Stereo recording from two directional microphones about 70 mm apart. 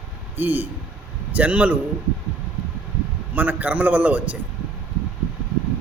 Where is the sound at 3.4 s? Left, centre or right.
Right.